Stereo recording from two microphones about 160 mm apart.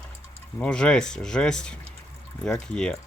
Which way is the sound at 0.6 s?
5° left (ahead or behind).